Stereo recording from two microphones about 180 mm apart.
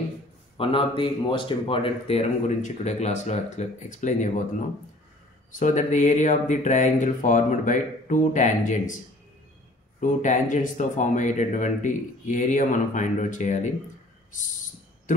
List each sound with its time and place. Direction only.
0.6 s speech: 30° left (ahead or behind)
5.6 s speech: 45° left (ahead or behind)
9.9 s speech: 45° left (ahead or behind)
15.1 s speech: 45° left (ahead or behind)